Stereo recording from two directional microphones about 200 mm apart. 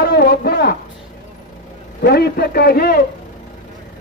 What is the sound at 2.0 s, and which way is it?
A man's voice, 55° left (ahead or behind).